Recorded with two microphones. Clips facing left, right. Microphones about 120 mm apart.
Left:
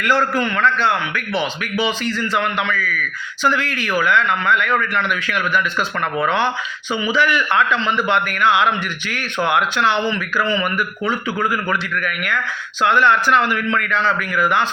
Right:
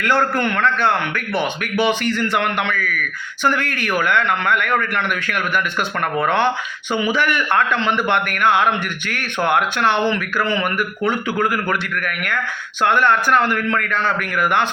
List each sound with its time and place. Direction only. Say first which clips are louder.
0.0 s a man's voice: even; 55° right (ahead or behind)